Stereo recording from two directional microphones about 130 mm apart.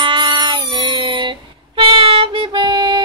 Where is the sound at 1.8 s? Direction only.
45° right (ahead or behind).